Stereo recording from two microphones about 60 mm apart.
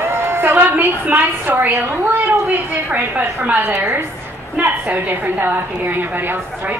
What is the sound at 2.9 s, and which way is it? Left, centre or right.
A woman's voice, right.